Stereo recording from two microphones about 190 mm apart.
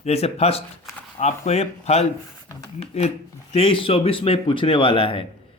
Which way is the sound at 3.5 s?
30° left (ahead or behind).